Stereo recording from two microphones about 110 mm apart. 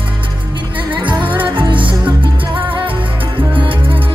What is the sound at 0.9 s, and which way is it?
Music, 45° right (ahead or behind).